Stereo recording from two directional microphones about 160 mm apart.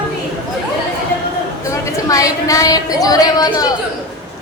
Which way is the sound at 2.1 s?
20° left (ahead or behind).